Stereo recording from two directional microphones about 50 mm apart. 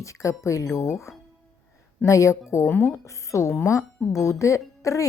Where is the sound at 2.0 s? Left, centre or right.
Left.